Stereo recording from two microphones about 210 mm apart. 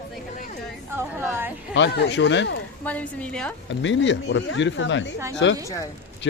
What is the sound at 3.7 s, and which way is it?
Speech, 60° left (ahead or behind).